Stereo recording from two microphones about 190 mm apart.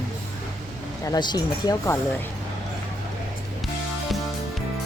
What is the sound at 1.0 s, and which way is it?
Speech, 20° left (ahead or behind).